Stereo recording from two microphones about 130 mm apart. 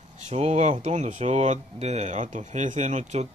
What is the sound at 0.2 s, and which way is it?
Speech, 55° right (ahead or behind).